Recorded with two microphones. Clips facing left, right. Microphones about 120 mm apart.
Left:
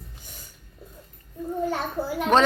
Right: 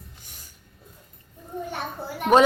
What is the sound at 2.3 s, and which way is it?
Speech, 10° right (ahead or behind).